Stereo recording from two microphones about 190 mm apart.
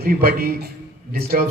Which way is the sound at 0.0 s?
50° right (ahead or behind).